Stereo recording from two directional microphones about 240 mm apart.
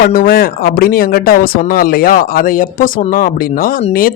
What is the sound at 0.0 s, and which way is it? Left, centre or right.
Speech, left.